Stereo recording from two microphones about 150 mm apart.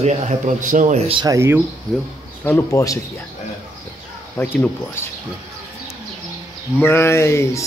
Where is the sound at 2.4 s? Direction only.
20° left (ahead or behind).